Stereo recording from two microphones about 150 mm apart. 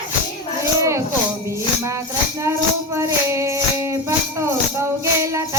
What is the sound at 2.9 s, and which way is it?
Music, 20° right (ahead or behind).